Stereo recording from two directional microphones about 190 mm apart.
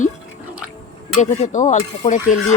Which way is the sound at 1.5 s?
40° left (ahead or behind).